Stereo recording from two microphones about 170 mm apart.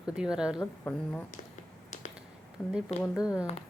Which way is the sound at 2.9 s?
40° left (ahead or behind).